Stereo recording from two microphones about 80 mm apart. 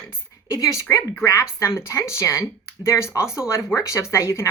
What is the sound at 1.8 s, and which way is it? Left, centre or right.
Speech, left.